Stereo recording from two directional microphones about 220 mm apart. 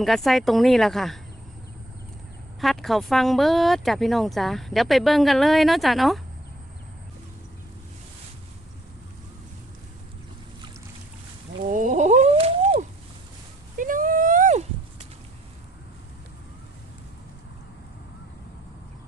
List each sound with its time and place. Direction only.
0.0 s speech: centre (ahead or behind)
2.6 s speech: centre (ahead or behind)
11.6 s speech: 35° right (ahead or behind)
13.7 s a sound: 35° right (ahead or behind)